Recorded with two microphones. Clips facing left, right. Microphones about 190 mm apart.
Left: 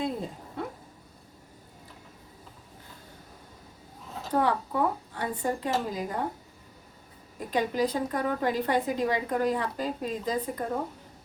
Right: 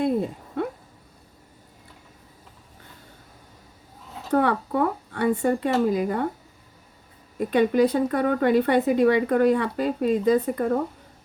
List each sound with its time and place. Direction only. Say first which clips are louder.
4.3 s a woman's voice: right 5 dB; 65° right (ahead or behind)
7.3 s a woman's voice: right 8 dB; 65° right (ahead or behind)